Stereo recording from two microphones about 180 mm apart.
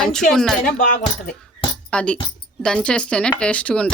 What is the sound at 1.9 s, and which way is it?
Speech, 5° left (ahead or behind).